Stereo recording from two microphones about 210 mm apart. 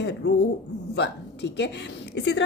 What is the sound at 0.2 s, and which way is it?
A woman's voice, 55° left (ahead or behind).